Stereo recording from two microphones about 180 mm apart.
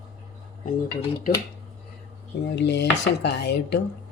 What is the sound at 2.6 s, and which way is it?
Speech, 70° left (ahead or behind).